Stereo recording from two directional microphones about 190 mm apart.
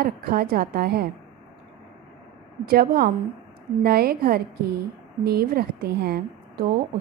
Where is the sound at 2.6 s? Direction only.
55° right (ahead or behind).